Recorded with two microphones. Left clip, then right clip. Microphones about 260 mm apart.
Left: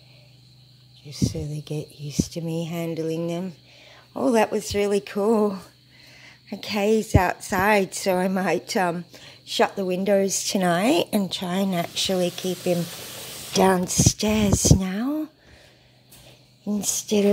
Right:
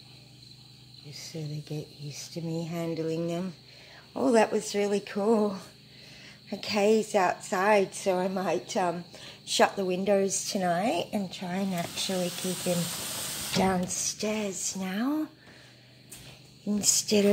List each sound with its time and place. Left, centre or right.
1.1 s a woman's voice: left
9.1 s a woman's voice: left
16.6 s speech: left